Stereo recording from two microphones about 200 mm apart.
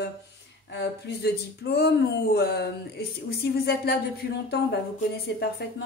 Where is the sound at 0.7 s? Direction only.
55° left (ahead or behind).